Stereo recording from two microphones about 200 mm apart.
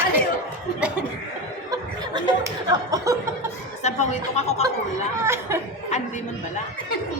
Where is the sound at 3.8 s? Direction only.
35° left (ahead or behind).